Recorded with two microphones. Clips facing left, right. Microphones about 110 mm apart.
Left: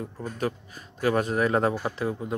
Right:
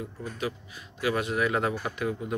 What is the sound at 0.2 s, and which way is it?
Speech, 45° left (ahead or behind).